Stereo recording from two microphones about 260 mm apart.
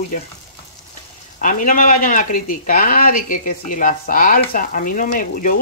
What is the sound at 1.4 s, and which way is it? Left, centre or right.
Speech, left.